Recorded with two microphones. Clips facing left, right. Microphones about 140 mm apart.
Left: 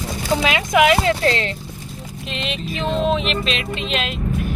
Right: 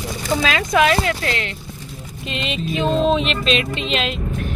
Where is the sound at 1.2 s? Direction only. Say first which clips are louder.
Left 5 dB; 30° left (ahead or behind).